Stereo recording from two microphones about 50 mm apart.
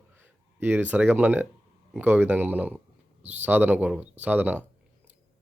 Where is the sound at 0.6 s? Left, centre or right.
Right.